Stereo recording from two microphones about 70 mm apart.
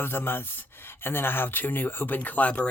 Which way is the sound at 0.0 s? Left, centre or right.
Left.